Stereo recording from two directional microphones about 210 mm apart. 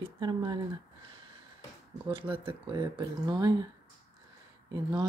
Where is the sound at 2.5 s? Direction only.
25° right (ahead or behind).